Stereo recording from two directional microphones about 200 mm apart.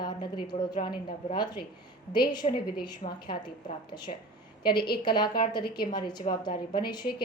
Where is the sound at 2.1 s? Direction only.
20° left (ahead or behind).